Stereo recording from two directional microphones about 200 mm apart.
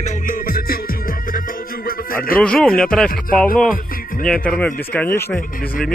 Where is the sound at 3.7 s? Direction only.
45° left (ahead or behind).